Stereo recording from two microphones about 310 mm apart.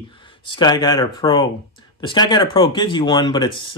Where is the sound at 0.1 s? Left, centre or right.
Centre.